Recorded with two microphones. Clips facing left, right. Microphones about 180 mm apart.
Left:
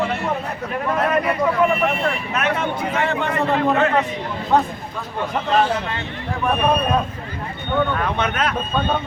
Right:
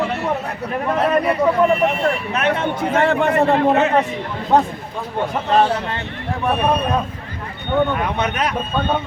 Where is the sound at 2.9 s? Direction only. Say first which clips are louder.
Right 7 dB; 50° right (ahead or behind).